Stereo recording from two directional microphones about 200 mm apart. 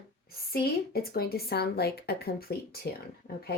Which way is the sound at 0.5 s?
50° left (ahead or behind).